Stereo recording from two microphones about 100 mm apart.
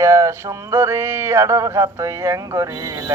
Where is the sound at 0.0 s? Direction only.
35° right (ahead or behind).